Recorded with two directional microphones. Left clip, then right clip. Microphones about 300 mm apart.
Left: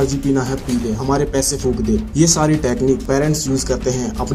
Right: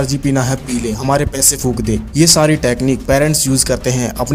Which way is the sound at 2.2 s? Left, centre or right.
Right.